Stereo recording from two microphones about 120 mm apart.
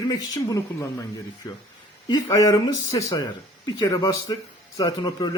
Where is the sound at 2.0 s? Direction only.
35° left (ahead or behind).